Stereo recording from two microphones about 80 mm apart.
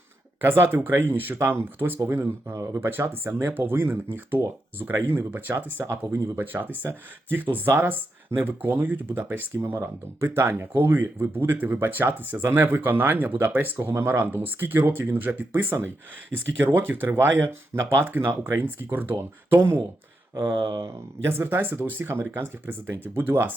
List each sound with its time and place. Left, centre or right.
0.4 s speech: right
20.6 s speech: right
20.8 s speech: right